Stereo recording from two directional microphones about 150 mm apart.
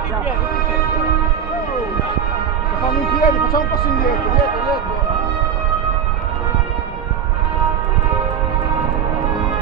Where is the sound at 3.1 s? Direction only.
70° left (ahead or behind).